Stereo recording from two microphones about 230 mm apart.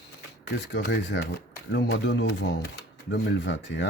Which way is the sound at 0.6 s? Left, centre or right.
Left.